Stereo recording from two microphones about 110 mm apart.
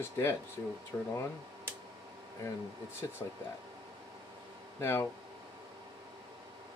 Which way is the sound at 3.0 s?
35° left (ahead or behind).